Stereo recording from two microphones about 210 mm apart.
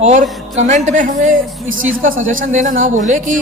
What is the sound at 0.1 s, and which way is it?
A woman's voice, 35° right (ahead or behind).